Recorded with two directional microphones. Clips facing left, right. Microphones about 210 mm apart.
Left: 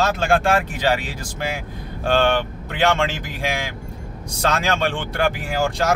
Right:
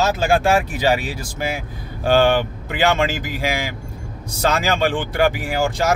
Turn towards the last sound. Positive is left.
turn(degrees=-5)  # may be behind; listen again after turning